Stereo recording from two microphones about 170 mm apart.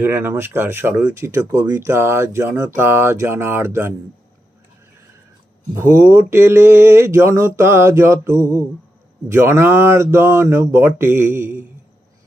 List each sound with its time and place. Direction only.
0.0 s speech: 10° right (ahead or behind)
5.7 s speech: 15° right (ahead or behind)